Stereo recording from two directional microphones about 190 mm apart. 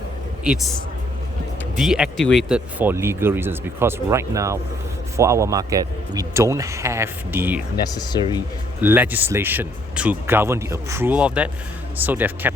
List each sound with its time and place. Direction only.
0.4 s a man's voice: centre (ahead or behind)
1.7 s speech: centre (ahead or behind)
7.9 s speech: 20° left (ahead or behind)
8.8 s speech: 10° right (ahead or behind)